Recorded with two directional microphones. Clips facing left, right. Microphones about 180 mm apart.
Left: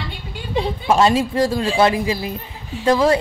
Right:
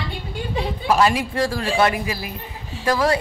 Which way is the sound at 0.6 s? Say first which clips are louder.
Left 3 dB; 25° left (ahead or behind).